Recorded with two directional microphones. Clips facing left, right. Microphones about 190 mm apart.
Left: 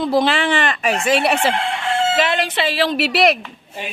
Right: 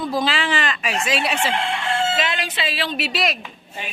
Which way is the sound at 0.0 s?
70° left (ahead or behind).